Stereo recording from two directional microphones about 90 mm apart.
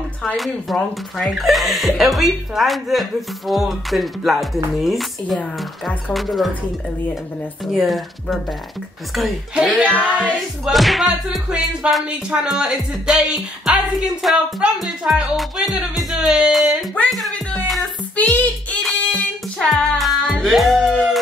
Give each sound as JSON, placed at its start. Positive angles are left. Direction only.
{"t": 0.4, "sound": "speech", "side_deg": 5}
{"t": 7.6, "sound": "speech", "side_deg": 0}
{"t": 10.1, "sound": "a sound", "side_deg": -10}
{"t": 10.7, "sound": "speech", "side_deg": 0}
{"t": 18.1, "sound": "a sound", "side_deg": 15}
{"t": 18.8, "sound": "music", "side_deg": 0}